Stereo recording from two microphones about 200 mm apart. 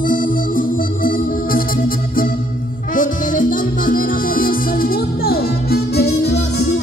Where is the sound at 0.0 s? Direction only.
40° left (ahead or behind).